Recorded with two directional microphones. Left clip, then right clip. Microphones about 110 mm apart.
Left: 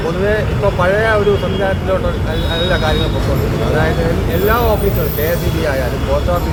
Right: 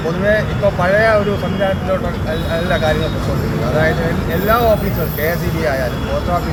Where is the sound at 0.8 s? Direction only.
5° left (ahead or behind).